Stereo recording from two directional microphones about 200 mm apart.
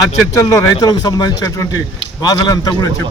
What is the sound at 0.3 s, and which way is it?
Speech, 15° left (ahead or behind).